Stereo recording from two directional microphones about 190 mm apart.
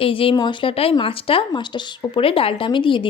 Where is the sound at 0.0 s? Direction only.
30° left (ahead or behind).